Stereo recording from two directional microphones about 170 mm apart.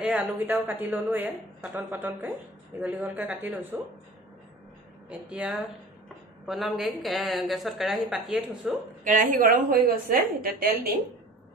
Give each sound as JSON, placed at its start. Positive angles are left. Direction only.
{"t": 0.0, "sound": "a woman's voice", "side_deg": -10}
{"t": 5.1, "sound": "a woman's voice", "side_deg": -10}
{"t": 9.0, "sound": "a woman's voice", "side_deg": -50}